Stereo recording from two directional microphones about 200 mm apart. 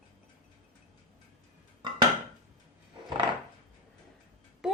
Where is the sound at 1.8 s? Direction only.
20° right (ahead or behind).